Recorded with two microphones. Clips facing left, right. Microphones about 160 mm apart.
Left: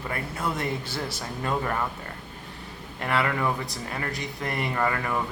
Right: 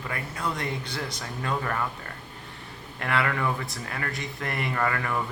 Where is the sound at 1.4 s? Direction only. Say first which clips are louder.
Left 2 dB; 20° left (ahead or behind).